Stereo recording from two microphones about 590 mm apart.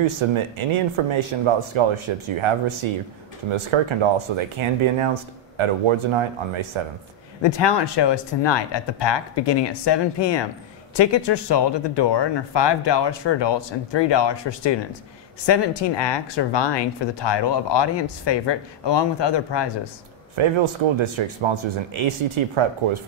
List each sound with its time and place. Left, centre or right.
0.2 s speech: right
7.4 s speech: left
20.3 s speech: right